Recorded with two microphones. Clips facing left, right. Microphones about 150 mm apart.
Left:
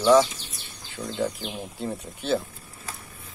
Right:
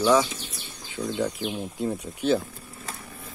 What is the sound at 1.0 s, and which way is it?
Speech, 5° left (ahead or behind).